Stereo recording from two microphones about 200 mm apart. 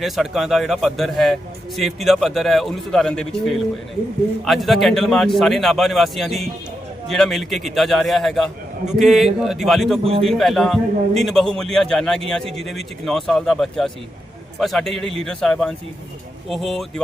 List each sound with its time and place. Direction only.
0.0 s a man's voice: centre (ahead or behind)
10.0 s a man's voice: 30° right (ahead or behind)
10.2 s a man's voice: centre (ahead or behind)